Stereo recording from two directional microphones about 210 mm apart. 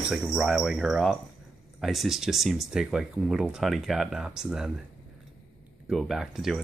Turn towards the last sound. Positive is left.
turn(degrees=0)  # may be behind; listen again after turning